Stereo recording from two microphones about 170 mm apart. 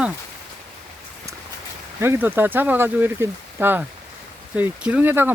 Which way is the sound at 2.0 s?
10° right (ahead or behind).